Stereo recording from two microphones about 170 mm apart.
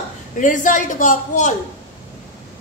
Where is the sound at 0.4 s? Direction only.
50° left (ahead or behind).